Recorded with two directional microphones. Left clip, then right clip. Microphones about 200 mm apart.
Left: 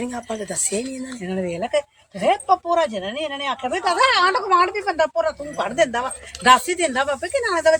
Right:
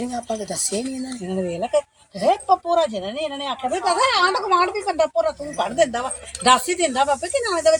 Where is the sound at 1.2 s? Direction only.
15° right (ahead or behind).